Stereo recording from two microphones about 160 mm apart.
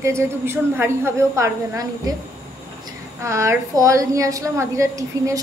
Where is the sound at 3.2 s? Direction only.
20° right (ahead or behind).